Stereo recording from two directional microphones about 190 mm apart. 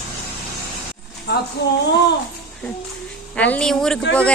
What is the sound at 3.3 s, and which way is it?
Speech, 5° left (ahead or behind).